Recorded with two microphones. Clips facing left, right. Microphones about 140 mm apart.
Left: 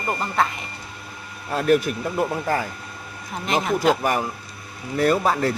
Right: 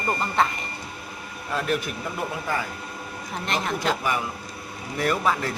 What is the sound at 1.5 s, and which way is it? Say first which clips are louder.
Speech: left 7 dB; 45° left (ahead or behind).